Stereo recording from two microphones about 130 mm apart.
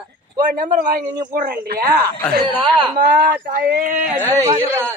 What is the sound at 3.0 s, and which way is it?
Speech, 90° right.